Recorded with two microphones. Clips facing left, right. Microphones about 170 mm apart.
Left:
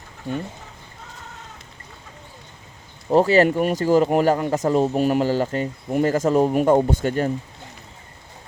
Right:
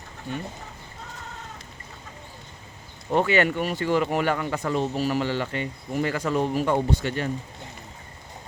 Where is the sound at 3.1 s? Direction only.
35° left (ahead or behind).